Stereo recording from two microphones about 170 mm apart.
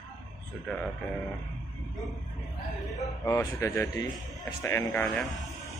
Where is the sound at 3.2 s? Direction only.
20° left (ahead or behind).